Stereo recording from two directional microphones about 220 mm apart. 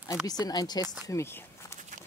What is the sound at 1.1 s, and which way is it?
Speech, 10° left (ahead or behind).